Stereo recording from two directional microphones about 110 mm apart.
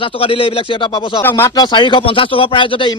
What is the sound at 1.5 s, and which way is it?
A man's voice, 40° left (ahead or behind).